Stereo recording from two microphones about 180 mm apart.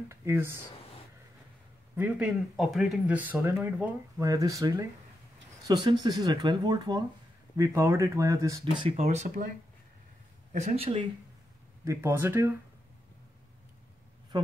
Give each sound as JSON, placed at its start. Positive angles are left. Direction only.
{"t": 0.1, "sound": "speech", "side_deg": -15}
{"t": 2.0, "sound": "speech", "side_deg": -10}
{"t": 8.9, "sound": "speech", "side_deg": -40}
{"t": 10.5, "sound": "speech", "side_deg": -40}
{"t": 11.8, "sound": "speech", "side_deg": -15}
{"t": 14.3, "sound": "speech", "side_deg": -25}